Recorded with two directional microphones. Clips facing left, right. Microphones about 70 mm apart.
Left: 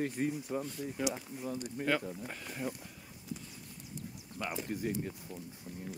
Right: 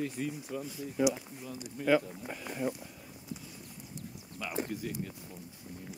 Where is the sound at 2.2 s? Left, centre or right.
Centre.